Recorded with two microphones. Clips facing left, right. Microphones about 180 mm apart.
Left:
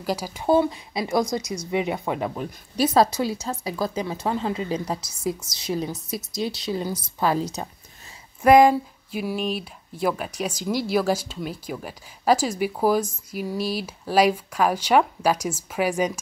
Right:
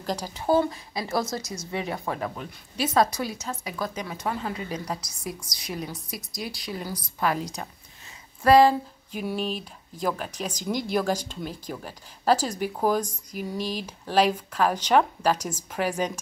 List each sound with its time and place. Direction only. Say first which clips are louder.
0.0 s speech: left 3 dB; 5° left (ahead or behind)
0.7 s speech: left 4 dB; 20° left (ahead or behind)
2.3 s a woman's voice: left 6 dB; 35° left (ahead or behind)
8.4 s a sound: left 3 dB; 15° left (ahead or behind)
9.2 s speech: left 2 dB; 5° left (ahead or behind)